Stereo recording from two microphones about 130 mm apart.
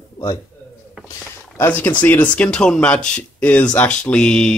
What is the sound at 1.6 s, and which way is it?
Speech, 15° left (ahead or behind).